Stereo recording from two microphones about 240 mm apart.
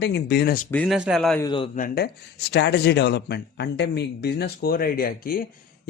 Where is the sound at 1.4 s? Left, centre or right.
Left.